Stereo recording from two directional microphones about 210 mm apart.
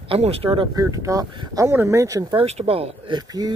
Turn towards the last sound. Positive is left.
turn(degrees=-20)  # may be behind; listen again after turning